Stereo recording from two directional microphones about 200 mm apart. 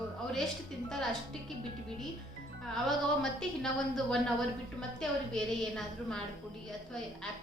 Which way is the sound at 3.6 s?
Centre (ahead or behind).